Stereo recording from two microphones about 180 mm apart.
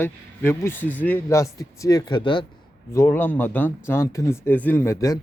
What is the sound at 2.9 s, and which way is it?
Speech, 10° left (ahead or behind).